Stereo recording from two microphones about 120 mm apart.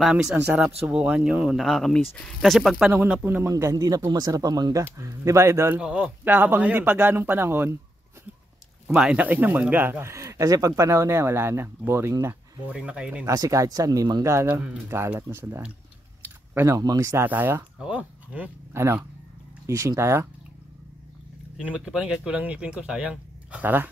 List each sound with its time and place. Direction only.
0.0 s speech: 5° right (ahead or behind)
2.9 s speech: 15° right (ahead or behind)
5.8 s speech: 10° right (ahead or behind)
8.8 s speech: 10° right (ahead or behind)
12.7 s speech: 10° right (ahead or behind)
13.3 s speech: 30° right (ahead or behind)
21.6 s speech: 5° right (ahead or behind)